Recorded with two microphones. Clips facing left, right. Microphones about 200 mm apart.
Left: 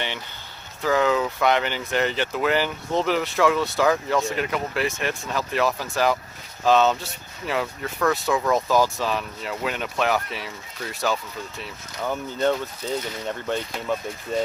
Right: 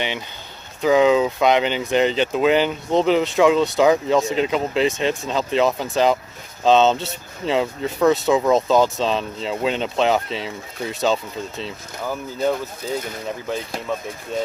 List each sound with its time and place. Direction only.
0.8 s speech: 15° right (ahead or behind)
12.0 s speech: 5° right (ahead or behind)